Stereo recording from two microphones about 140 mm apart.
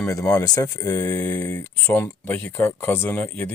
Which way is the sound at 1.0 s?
15° left (ahead or behind).